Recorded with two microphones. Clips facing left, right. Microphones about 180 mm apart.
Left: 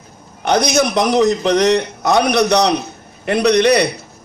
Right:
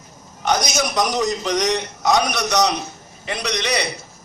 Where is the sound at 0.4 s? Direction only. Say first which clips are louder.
Left 6 dB; 60° left (ahead or behind).